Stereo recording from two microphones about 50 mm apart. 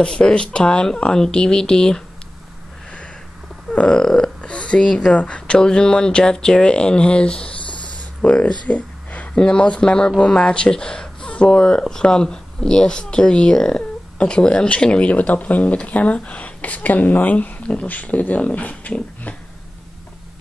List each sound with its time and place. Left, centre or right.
0.0 s speech: centre
3.7 s speech: centre